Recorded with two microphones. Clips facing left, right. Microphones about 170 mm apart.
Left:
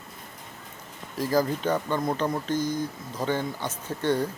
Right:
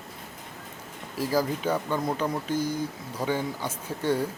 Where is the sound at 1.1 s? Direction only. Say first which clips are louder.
Left 2 dB; 10° right (ahead or behind).